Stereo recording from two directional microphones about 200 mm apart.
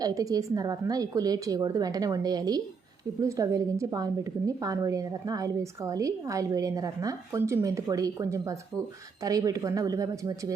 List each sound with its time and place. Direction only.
0.0 s a woman's voice: 15° right (ahead or behind)